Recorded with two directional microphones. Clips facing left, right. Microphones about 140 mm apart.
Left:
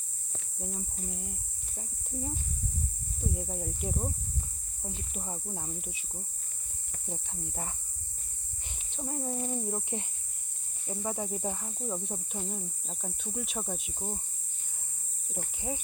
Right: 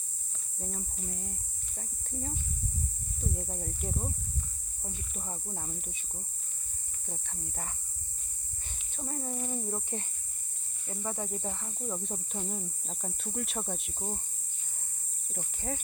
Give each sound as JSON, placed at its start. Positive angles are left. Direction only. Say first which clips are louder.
{"t": 0.8, "sound": "speech", "louder": "left 1 dB", "side_deg": 5}
{"t": 3.3, "sound": "speech", "louder": "left 2 dB", "side_deg": 5}
{"t": 5.1, "sound": "speech", "louder": "left 1 dB", "side_deg": 10}
{"t": 7.1, "sound": "speech", "louder": "left 3 dB", "side_deg": 15}
{"t": 9.0, "sound": "speech", "louder": "left 2 dB", "side_deg": 10}
{"t": 15.6, "sound": "speech", "louder": "even", "side_deg": 5}